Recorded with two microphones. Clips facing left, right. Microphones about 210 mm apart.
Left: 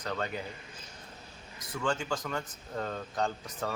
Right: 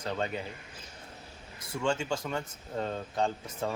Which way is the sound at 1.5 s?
25° right (ahead or behind).